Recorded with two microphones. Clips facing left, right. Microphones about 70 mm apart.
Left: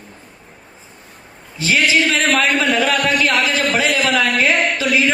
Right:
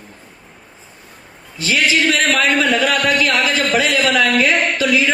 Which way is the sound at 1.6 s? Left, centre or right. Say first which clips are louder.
Left 1 dB; left.